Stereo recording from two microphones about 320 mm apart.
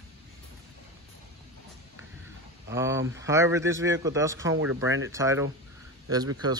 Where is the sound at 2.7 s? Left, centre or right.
Centre.